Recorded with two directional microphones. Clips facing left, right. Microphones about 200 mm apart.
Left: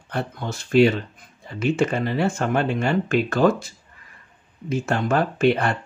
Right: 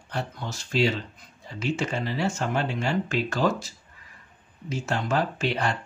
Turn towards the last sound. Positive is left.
turn(degrees=55)  # may be behind; listen again after turning